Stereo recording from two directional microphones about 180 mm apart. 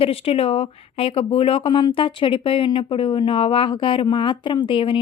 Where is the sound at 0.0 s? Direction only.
30° left (ahead or behind).